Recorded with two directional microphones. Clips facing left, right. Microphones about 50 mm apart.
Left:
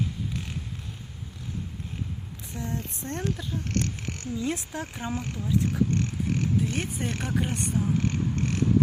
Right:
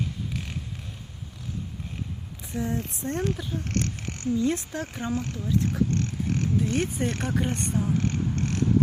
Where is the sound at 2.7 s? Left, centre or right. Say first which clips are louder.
Right 4 dB; centre.